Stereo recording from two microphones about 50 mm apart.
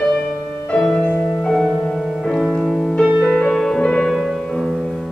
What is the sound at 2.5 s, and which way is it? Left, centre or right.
Music, centre.